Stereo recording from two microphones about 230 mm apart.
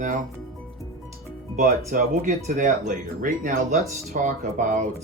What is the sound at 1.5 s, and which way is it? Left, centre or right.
Speech, right.